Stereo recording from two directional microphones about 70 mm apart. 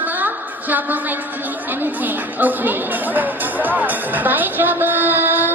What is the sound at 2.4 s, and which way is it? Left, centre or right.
Speech, right.